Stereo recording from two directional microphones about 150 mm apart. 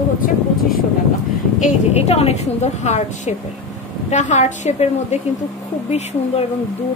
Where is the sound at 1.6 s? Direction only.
45° left (ahead or behind).